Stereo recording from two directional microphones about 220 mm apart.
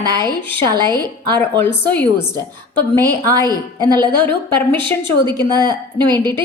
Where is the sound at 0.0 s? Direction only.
20° right (ahead or behind).